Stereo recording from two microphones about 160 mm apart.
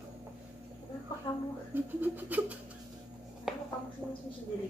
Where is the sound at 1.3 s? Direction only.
30° left (ahead or behind).